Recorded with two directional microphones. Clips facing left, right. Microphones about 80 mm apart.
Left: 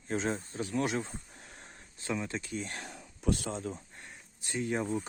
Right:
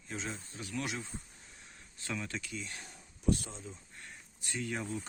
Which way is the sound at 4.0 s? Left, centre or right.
Left.